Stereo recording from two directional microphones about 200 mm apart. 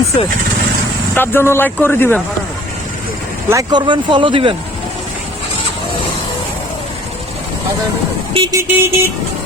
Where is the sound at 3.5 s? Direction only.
20° right (ahead or behind).